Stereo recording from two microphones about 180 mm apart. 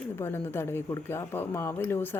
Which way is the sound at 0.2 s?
10° left (ahead or behind).